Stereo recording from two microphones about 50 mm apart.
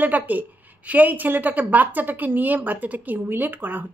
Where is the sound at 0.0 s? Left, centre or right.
Right.